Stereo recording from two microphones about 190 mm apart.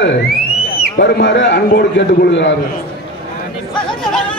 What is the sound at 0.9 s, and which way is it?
A man's voice, 65° left (ahead or behind).